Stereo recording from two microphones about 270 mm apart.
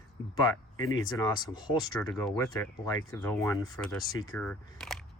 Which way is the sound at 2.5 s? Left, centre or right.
Centre.